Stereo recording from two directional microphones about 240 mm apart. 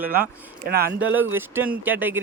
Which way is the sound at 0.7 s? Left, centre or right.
Right.